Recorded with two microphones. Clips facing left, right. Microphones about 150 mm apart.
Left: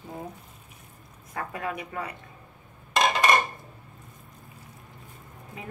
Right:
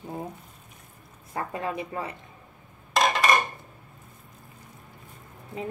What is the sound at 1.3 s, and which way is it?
Speech, 25° right (ahead or behind).